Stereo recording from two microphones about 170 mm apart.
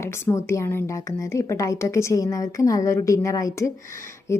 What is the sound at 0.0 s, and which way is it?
A woman's voice, 15° left (ahead or behind).